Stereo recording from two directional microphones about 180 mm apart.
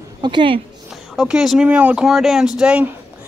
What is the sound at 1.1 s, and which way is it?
Speech, centre (ahead or behind).